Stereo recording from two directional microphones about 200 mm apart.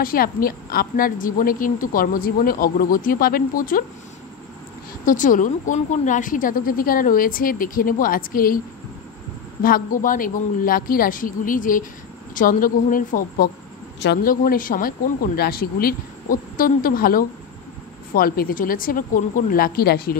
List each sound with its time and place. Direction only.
0.0 s a woman's voice: 45° left (ahead or behind)
5.0 s a woman's voice: 40° left (ahead or behind)
9.6 s a woman's voice: 45° left (ahead or behind)
13.9 s speech: 60° left (ahead or behind)
14.3 s a woman's voice: 45° left (ahead or behind)